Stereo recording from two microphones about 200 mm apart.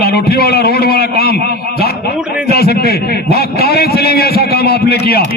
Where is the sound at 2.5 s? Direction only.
50° left (ahead or behind).